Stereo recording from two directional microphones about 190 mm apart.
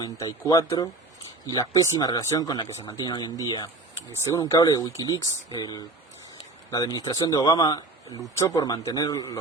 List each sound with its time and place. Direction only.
0.0 s speech: 20° left (ahead or behind)